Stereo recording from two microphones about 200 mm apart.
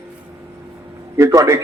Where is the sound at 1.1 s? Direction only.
15° right (ahead or behind).